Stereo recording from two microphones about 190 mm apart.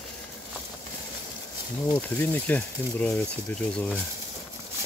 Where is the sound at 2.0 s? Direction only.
10° left (ahead or behind).